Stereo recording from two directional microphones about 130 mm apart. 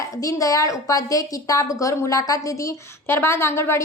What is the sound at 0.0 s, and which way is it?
A woman's voice, 25° left (ahead or behind).